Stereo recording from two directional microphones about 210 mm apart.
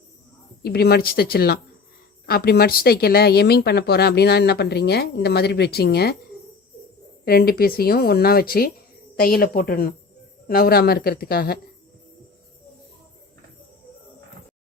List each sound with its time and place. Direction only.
0.6 s speech: 50° left (ahead or behind)
7.3 s speech: 45° left (ahead or behind)